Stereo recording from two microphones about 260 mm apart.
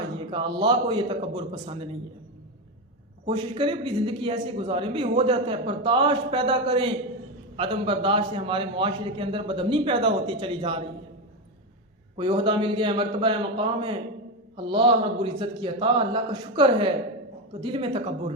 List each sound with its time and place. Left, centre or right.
0.3 s a man's voice: centre
3.2 s a man's voice: centre
12.1 s a man's voice: centre